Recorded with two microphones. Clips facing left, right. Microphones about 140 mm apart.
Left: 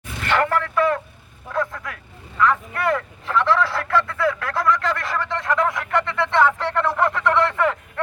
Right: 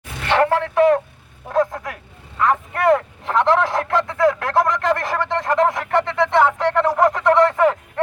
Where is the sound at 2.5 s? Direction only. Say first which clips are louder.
Right 5 dB; 45° right (ahead or behind).